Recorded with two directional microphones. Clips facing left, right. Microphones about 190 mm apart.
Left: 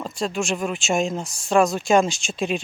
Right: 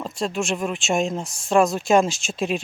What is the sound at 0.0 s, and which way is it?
Speech, centre (ahead or behind).